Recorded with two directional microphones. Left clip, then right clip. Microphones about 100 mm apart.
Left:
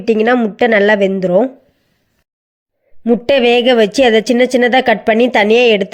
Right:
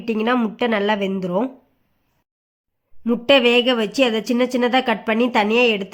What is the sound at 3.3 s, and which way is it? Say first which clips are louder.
Speech: left 4 dB; 35° left (ahead or behind).